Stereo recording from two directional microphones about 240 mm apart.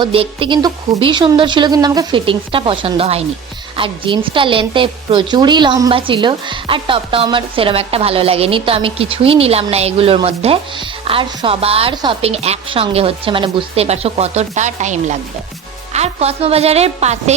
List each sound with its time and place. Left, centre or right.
0.0 s a woman's voice: right